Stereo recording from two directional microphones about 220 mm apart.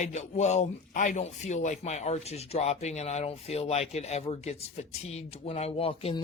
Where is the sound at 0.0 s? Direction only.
30° left (ahead or behind).